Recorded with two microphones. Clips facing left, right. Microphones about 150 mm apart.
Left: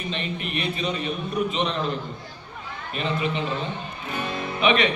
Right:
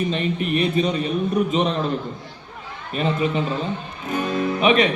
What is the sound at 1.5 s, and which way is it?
Music, 40° right (ahead or behind).